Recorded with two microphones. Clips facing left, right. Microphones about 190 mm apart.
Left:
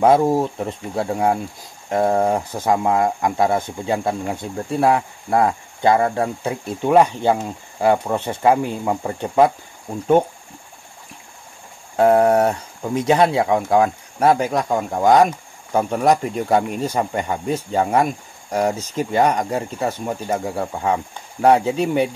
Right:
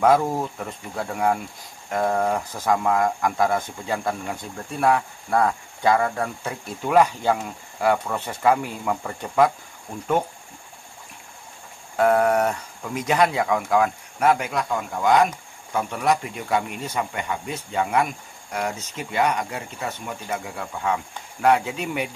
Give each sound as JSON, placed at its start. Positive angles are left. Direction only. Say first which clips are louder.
{"t": 0.0, "sound": "speech", "louder": "left 4 dB", "side_deg": 25}
{"t": 12.0, "sound": "speech", "louder": "left 5 dB", "side_deg": 30}